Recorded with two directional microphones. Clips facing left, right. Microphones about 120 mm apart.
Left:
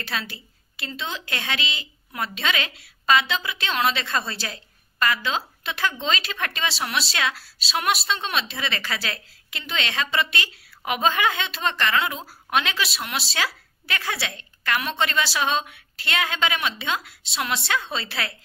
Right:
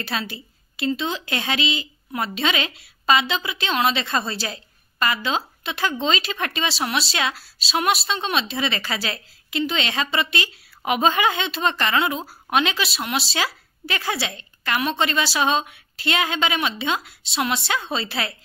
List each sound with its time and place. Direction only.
0.7 s a woman's voice: 30° right (ahead or behind)